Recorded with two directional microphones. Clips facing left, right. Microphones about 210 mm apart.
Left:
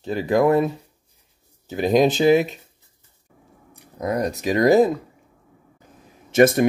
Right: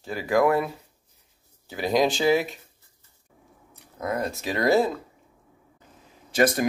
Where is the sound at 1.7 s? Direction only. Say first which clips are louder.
Left 5 dB; 20° left (ahead or behind).